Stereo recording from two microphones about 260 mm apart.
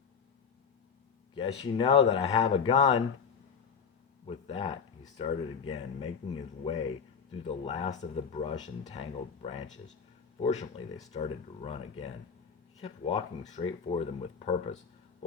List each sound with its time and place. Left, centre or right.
1.4 s speech: left
4.3 s speech: left